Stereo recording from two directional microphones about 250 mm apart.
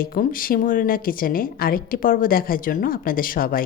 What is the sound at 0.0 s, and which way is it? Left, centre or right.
A woman's voice, left.